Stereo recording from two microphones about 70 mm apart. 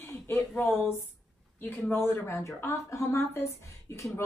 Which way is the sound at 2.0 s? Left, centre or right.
Left.